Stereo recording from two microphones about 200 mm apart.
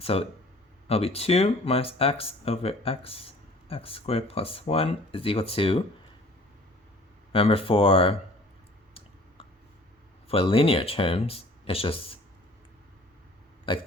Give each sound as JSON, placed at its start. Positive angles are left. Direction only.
{"t": 0.0, "sound": "speech", "side_deg": 30}
{"t": 7.3, "sound": "speech", "side_deg": 30}
{"t": 10.2, "sound": "speech", "side_deg": 30}
{"t": 13.7, "sound": "speech", "side_deg": 25}